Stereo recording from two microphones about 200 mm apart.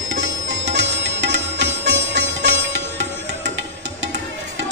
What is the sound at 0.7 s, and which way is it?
Music, 60° right (ahead or behind).